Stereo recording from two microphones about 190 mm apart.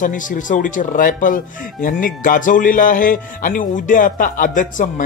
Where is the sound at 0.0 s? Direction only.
45° left (ahead or behind).